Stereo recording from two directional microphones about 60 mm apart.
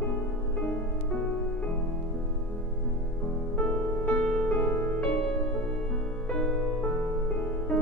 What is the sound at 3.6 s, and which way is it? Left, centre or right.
Music, left.